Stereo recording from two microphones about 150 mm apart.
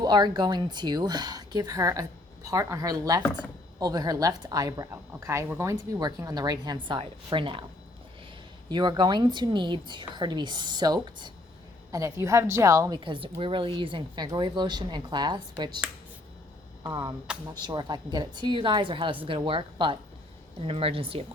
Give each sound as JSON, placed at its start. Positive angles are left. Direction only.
{"t": 0.0, "sound": "speech", "side_deg": -30}
{"t": 8.7, "sound": "a woman's voice", "side_deg": -30}
{"t": 16.8, "sound": "a woman's voice", "side_deg": -25}